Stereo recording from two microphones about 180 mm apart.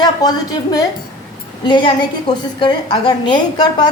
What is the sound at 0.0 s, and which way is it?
A woman's voice, 20° left (ahead or behind).